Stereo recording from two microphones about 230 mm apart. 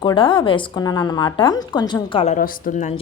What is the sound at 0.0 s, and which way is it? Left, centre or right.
A woman's voice, left.